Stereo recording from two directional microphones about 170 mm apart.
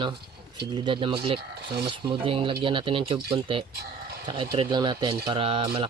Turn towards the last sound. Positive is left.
turn(degrees=-30)  # may be behind; listen again after turning